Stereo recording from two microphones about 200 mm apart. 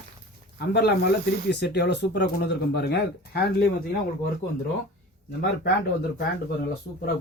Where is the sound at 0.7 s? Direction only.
55° left (ahead or behind).